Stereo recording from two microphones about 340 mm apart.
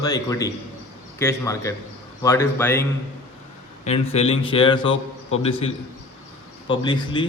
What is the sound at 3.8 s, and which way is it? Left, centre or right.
A man's voice, centre.